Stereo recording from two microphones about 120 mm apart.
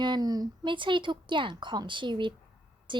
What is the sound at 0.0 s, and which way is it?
Speech, 35° right (ahead or behind).